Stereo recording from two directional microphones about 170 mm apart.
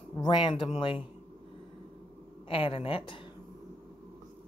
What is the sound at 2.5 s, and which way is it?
Speech, 30° left (ahead or behind).